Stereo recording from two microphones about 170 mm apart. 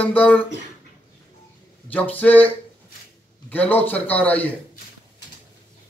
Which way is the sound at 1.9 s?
10° left (ahead or behind).